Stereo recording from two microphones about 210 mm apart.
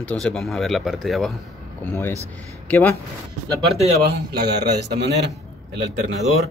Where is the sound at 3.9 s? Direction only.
50° right (ahead or behind).